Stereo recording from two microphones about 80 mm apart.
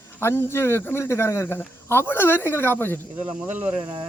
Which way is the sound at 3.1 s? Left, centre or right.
Centre.